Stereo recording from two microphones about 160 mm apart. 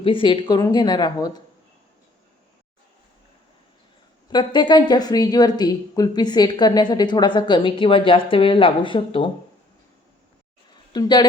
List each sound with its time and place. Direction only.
0.0 s speech: 35° left (ahead or behind)
4.3 s speech: 25° left (ahead or behind)
10.9 s speech: 25° left (ahead or behind)